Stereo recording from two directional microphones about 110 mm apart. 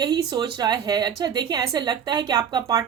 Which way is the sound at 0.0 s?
40° right (ahead or behind).